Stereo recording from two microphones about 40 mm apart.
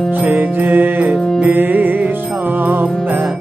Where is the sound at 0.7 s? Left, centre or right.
Right.